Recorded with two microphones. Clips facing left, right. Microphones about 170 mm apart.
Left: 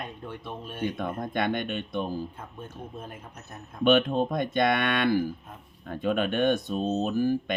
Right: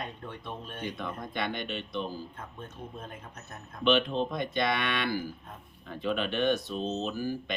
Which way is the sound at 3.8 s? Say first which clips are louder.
Left 4 dB; 50° left (ahead or behind).